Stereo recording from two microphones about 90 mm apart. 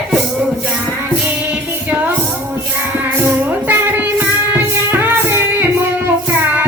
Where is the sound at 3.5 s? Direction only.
20° right (ahead or behind).